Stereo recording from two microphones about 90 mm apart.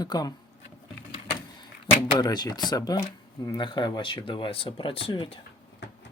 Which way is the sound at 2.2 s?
50° left (ahead or behind).